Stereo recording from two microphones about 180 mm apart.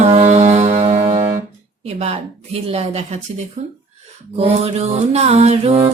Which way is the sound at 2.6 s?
35° right (ahead or behind).